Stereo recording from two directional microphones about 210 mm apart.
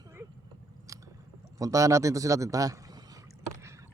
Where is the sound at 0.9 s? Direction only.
15° right (ahead or behind).